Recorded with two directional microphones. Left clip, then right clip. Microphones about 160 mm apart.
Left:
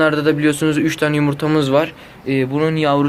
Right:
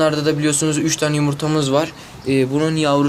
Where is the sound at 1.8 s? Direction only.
15° right (ahead or behind).